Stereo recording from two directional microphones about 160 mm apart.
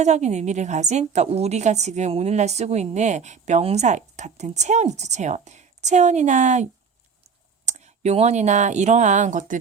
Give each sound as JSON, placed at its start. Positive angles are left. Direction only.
{"t": 0.0, "sound": "a woman's voice", "side_deg": -45}
{"t": 7.7, "sound": "speech", "side_deg": -45}